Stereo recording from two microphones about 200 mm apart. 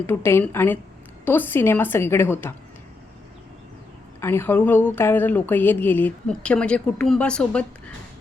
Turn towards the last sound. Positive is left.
turn(degrees=5)  # may be behind; listen again after turning